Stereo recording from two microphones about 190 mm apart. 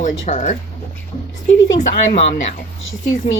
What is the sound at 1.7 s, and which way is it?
Speech, 35° left (ahead or behind).